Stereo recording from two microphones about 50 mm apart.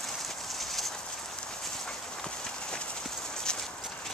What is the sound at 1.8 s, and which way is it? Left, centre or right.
Clip-clop, centre.